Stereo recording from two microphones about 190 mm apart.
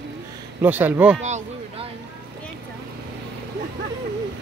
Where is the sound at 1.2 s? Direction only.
35° right (ahead or behind).